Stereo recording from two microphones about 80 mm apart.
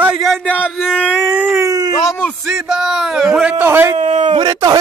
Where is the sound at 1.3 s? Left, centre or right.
Right.